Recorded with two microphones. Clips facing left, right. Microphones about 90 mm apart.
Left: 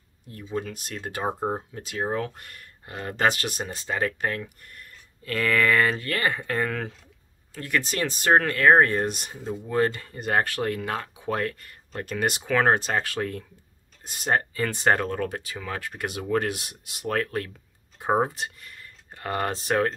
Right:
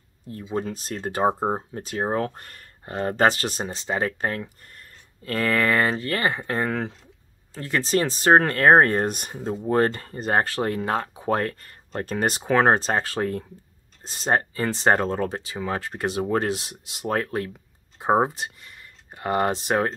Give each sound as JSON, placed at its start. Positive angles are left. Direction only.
{"t": 0.3, "sound": "speech", "side_deg": -35}